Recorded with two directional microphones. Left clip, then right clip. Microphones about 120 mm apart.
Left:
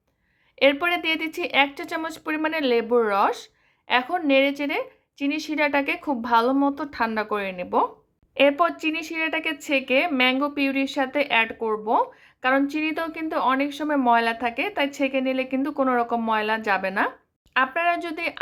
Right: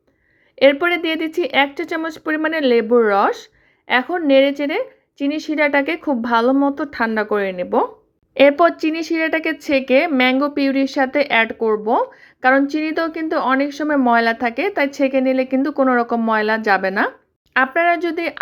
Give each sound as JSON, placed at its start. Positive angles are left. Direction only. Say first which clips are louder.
{"t": 0.6, "sound": "a woman's voice", "louder": "right 6 dB", "side_deg": -25}
{"t": 8.4, "sound": "speech", "louder": "right 7 dB", "side_deg": -45}
{"t": 14.1, "sound": "speech", "louder": "right 3 dB", "side_deg": -40}